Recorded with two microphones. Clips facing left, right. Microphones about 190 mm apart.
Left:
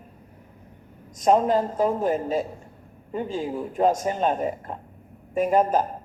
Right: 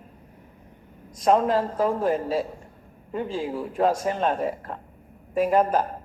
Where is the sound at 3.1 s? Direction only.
Centre (ahead or behind).